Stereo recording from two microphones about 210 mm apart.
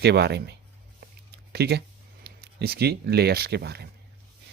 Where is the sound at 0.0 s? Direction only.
50° right (ahead or behind).